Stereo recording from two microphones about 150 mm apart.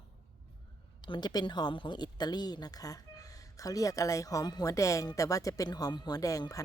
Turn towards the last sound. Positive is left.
turn(degrees=20)  # may be behind; listen again after turning